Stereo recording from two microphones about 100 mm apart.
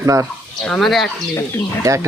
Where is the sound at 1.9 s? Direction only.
35° right (ahead or behind).